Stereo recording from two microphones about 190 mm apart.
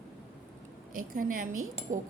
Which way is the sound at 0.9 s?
45° right (ahead or behind).